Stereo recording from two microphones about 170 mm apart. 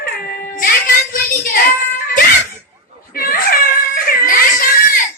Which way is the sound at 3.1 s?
55° left (ahead or behind).